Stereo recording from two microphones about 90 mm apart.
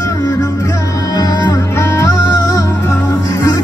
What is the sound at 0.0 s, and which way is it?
Music, 40° left (ahead or behind).